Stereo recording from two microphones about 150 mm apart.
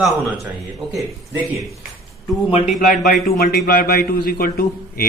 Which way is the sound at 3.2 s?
85° left.